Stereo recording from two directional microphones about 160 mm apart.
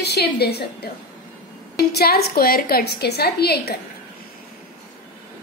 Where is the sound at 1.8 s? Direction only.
80° left.